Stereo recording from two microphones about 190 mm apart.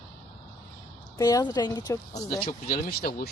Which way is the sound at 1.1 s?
20° left (ahead or behind).